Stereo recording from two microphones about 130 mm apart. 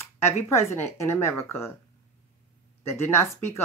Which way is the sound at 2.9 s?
20° left (ahead or behind).